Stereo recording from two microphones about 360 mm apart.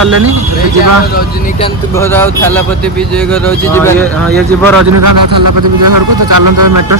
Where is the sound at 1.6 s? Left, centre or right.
Centre.